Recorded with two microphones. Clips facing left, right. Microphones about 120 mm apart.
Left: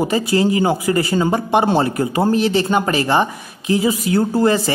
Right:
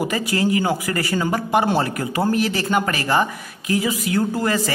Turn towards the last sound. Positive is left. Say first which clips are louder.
# left 5 dB
turn(degrees=30)  # may be behind; listen again after turning